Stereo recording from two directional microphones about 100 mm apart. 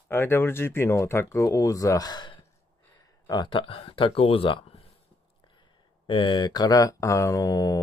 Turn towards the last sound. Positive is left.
turn(degrees=35)  # may be behind; listen again after turning